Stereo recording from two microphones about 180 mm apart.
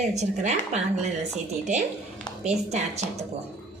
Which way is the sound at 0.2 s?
40° right (ahead or behind).